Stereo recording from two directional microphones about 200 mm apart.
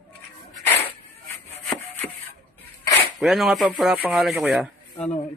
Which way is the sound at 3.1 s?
Centre (ahead or behind).